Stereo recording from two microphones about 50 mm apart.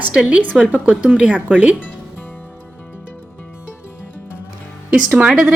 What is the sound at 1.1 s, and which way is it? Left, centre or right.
Speech, right.